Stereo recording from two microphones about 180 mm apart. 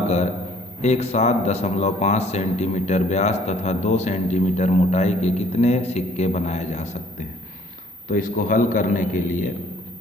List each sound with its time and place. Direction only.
0.8 s a man's voice: 35° left (ahead or behind)